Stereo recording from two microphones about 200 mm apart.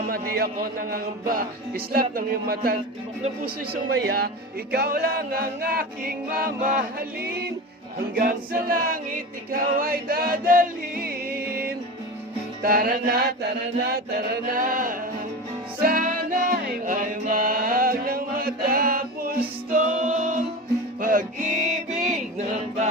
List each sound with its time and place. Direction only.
0.1 s music: 50° right (ahead or behind)
4.7 s music: 50° right (ahead or behind)
7.9 s music: 45° right (ahead or behind)